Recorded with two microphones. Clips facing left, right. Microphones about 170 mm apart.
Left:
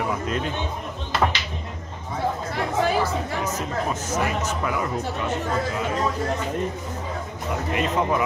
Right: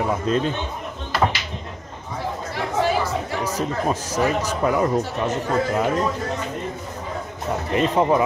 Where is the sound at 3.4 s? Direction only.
35° right (ahead or behind).